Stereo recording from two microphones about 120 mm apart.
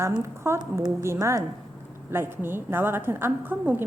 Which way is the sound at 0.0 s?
20° right (ahead or behind).